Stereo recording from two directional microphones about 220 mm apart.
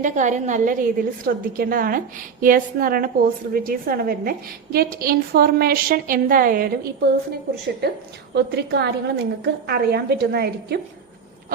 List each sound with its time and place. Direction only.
0.0 s a woman's voice: 35° right (ahead or behind)
8.4 s a woman's voice: 50° right (ahead or behind)